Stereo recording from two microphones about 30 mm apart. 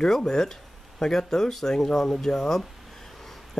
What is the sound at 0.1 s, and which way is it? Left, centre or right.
Speech, centre.